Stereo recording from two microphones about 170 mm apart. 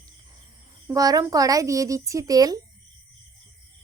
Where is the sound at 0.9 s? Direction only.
20° right (ahead or behind).